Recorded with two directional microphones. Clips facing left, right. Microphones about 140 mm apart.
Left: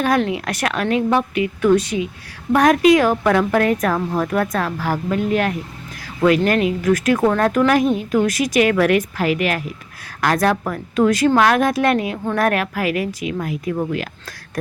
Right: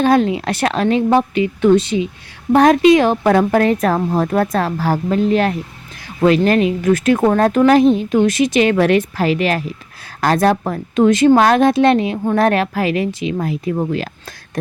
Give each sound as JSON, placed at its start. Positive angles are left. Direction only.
{"t": 0.0, "sound": "a woman's voice", "side_deg": -25}